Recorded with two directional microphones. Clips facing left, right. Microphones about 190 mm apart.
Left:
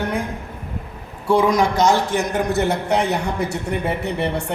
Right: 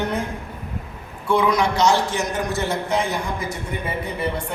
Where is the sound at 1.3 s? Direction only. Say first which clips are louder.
Left 3 dB; 40° left (ahead or behind).